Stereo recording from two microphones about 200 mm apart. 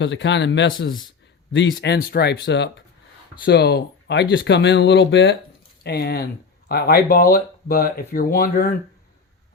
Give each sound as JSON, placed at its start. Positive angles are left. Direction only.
{"t": 0.0, "sound": "speech", "side_deg": 65}